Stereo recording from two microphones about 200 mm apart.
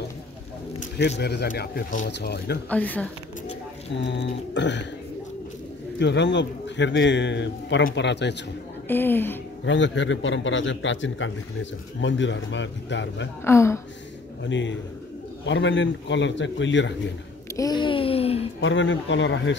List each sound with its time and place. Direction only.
0.9 s a man's voice: 60° left (ahead or behind)
2.7 s a woman's voice: 5° left (ahead or behind)
3.9 s a man's voice: 60° left (ahead or behind)
5.9 s a man's voice: 60° left (ahead or behind)
8.8 s a woman's voice: 10° left (ahead or behind)
9.7 s a man's voice: 65° left (ahead or behind)
13.4 s a woman's voice: 15° left (ahead or behind)
14.4 s a man's voice: 65° left (ahead or behind)
17.6 s a sound: 20° left (ahead or behind)
18.6 s a man's voice: 70° left (ahead or behind)